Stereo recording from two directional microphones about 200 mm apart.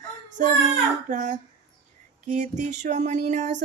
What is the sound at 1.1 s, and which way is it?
Speech, 40° right (ahead or behind).